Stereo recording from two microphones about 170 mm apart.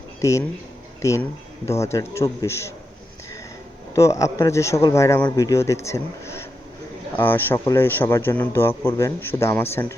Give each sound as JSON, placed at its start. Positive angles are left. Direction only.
{"t": 0.2, "sound": "a man's voice", "side_deg": 15}
{"t": 3.9, "sound": "a man's voice", "side_deg": 15}